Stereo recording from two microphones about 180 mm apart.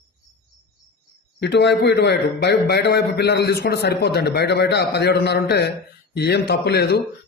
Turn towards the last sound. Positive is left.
turn(degrees=65)  # may be behind; listen again after turning